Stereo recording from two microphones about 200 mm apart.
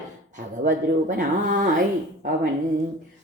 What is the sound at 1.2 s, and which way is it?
Speech, 40° right (ahead or behind).